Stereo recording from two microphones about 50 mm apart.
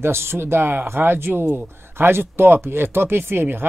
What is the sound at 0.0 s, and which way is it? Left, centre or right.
Speech, right.